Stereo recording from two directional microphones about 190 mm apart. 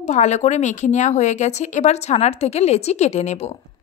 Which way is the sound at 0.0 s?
40° left (ahead or behind).